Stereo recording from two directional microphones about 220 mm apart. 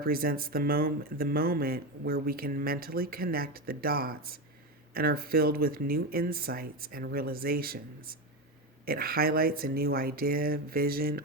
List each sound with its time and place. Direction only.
0.0 s speech: 40° right (ahead or behind)